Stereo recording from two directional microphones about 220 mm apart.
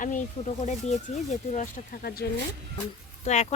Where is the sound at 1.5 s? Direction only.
40° left (ahead or behind).